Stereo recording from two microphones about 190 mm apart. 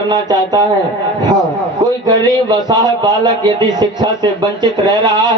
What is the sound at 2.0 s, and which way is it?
A man's voice, 20° right (ahead or behind).